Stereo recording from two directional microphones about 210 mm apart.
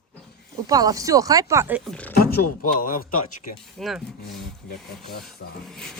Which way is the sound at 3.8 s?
Centre (ahead or behind).